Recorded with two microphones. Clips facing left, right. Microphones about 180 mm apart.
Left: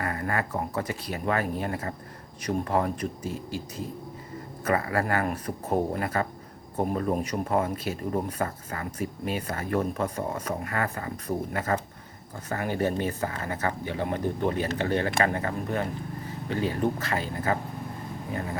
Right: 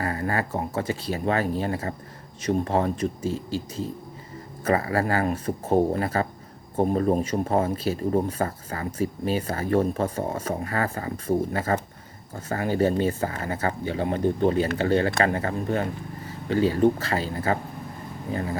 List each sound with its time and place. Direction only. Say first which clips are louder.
0.0 s speech: right 3 dB; 30° right (ahead or behind)